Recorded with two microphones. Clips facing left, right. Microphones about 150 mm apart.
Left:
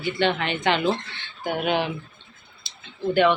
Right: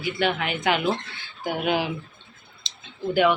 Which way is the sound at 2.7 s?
20° right (ahead or behind).